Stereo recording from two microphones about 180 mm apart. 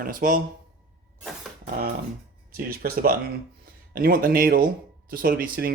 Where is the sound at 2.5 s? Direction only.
55° right (ahead or behind).